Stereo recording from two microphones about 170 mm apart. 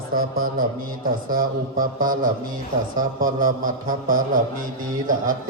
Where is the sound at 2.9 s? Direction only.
55° right (ahead or behind).